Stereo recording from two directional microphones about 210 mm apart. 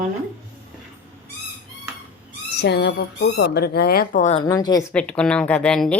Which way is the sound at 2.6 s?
50° left (ahead or behind).